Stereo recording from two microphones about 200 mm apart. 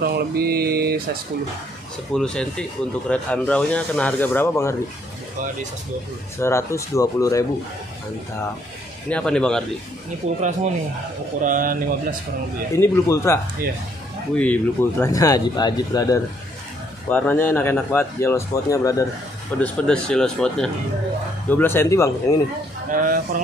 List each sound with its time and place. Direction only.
0.0 s mantra: 50° right (ahead or behind)
2.1 s a man's voice: 5° left (ahead or behind)
6.3 s a man's voice: 15° left (ahead or behind)
9.1 s speech: 5° left (ahead or behind)
10.2 s speech: 35° right (ahead or behind)
11.4 s mantra: 45° right (ahead or behind)
12.7 s a man's voice: 15° left (ahead or behind)
19.6 s a man's voice: 5° left (ahead or behind)
22.8 s mantra: 45° right (ahead or behind)